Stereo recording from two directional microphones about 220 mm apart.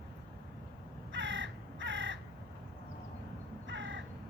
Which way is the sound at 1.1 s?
55° right (ahead or behind).